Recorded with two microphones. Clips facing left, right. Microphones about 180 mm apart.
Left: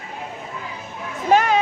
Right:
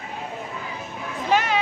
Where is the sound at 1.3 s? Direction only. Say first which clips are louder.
Left 5 dB; 45° left (ahead or behind).